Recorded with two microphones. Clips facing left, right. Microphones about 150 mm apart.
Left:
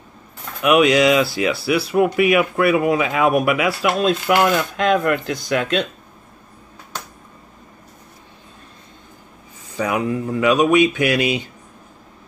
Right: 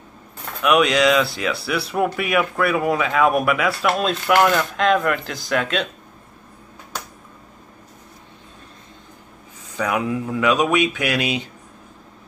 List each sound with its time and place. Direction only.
0.6 s speech: 5° left (ahead or behind)
9.8 s speech: centre (ahead or behind)